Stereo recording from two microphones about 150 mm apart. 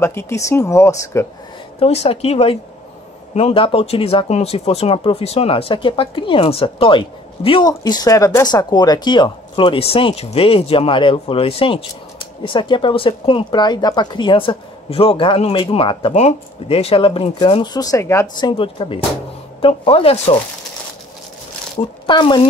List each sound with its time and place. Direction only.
0.0 s speech: 15° left (ahead or behind)
1.8 s a woman's voice: 40° left (ahead or behind); by 18.2 s 20° left (ahead or behind)
18.4 s speech: 35° left (ahead or behind)
22.0 s speech: 30° left (ahead or behind)